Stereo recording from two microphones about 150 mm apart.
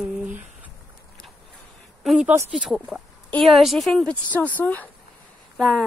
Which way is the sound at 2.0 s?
5° right (ahead or behind).